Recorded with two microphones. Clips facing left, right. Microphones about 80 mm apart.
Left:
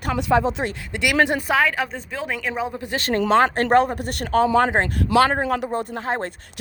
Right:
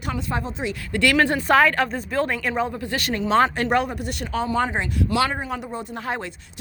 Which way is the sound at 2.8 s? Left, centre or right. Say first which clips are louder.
Even; left.